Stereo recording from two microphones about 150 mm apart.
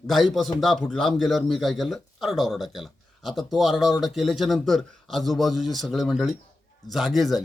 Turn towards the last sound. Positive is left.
turn(degrees=0)  # may be behind; listen again after turning